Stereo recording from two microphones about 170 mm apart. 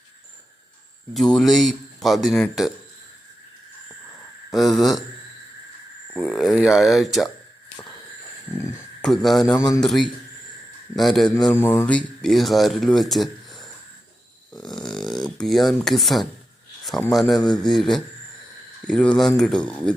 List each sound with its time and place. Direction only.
1.1 s speech: centre (ahead or behind)
4.5 s speech: centre (ahead or behind)
6.1 s speech: 5° left (ahead or behind)
8.5 s a sound: 15° left (ahead or behind)
9.0 s speech: centre (ahead or behind)
14.6 s a sound: 5° left (ahead or behind)
15.4 s speech: centre (ahead or behind)
17.3 s a man's voice: 25° left (ahead or behind)
17.7 s speech: centre (ahead or behind)